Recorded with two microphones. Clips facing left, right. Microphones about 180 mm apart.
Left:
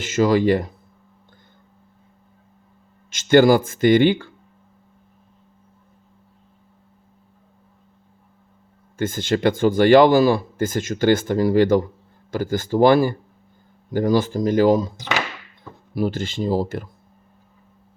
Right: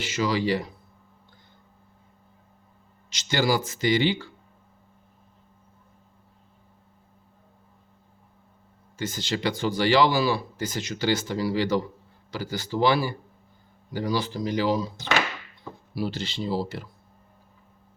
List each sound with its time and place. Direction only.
0.0 s speech: 50° left (ahead or behind)
3.1 s speech: 50° left (ahead or behind)
9.0 s speech: 50° left (ahead or behind)
16.0 s speech: 50° left (ahead or behind)